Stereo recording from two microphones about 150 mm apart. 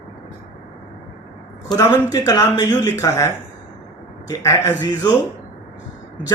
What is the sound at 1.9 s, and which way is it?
Speech, 25° left (ahead or behind).